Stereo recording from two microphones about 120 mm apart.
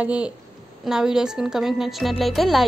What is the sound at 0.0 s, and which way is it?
A woman's voice, 10° right (ahead or behind).